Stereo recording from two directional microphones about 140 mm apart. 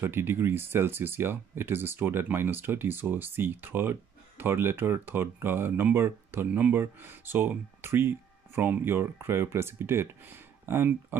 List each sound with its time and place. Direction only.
0.0 s speech: 15° right (ahead or behind)